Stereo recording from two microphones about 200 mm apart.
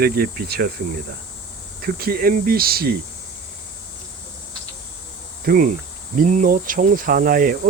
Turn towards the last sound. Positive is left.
turn(degrees=-45)  # may be behind; listen again after turning